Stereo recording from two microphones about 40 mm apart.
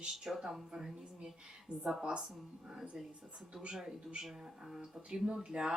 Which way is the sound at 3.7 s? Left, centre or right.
Centre.